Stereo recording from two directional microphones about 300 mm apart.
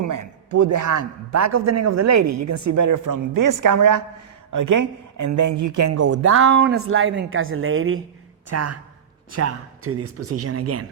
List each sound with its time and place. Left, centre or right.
0.0 s a man's voice: right
8.4 s speech: right